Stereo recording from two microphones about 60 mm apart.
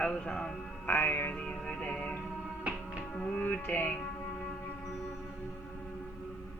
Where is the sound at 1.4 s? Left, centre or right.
Centre.